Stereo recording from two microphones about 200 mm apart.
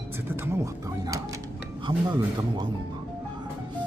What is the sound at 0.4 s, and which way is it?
Speech, 15° right (ahead or behind).